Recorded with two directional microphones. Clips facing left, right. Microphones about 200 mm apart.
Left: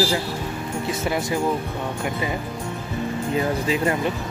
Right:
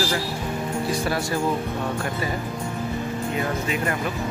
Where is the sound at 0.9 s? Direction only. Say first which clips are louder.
Left 3 dB; 20° left (ahead or behind).